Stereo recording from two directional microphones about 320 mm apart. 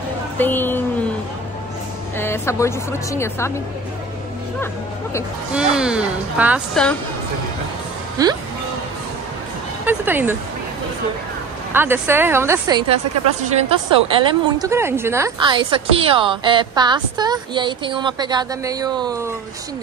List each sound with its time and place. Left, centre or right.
0.4 s speech: centre
2.1 s a woman's voice: centre
5.5 s a woman's voice: centre
8.2 s a woman's voice: centre
9.8 s a woman's voice: centre
11.7 s a woman's voice: centre